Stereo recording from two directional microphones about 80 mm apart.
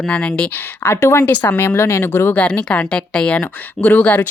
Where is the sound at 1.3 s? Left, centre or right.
Left.